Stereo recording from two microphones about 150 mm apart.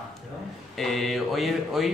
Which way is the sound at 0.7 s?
Centre (ahead or behind).